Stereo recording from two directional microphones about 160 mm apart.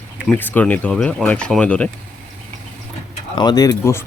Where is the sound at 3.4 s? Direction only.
25° left (ahead or behind).